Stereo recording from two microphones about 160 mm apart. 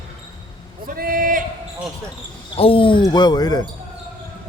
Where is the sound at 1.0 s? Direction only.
60° right (ahead or behind).